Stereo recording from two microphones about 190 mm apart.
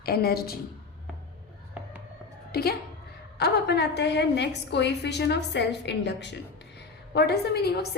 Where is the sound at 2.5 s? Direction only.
55° left (ahead or behind).